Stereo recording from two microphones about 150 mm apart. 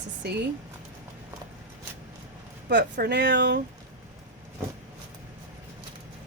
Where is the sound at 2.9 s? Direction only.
90° right.